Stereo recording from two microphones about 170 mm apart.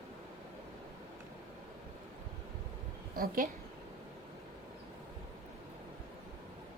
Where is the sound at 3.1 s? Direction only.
60° right (ahead or behind).